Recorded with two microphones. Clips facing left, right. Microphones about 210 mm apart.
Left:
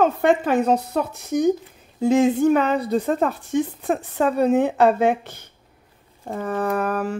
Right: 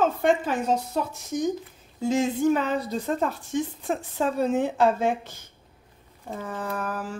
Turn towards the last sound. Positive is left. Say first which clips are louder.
# left 8 dB
turn(degrees=65)  # may be behind; listen again after turning